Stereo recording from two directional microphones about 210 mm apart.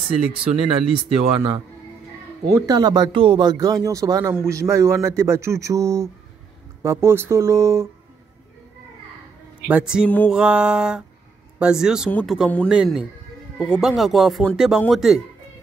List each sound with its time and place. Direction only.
0.3 s speech: 25° right (ahead or behind)
2.5 s speech: 15° right (ahead or behind)
9.7 s speech: 5° right (ahead or behind)
10.0 s music: 10° left (ahead or behind)
10.3 s speech: 5° right (ahead or behind)
12.1 s music: 10° left (ahead or behind)
12.4 s speech: centre (ahead or behind)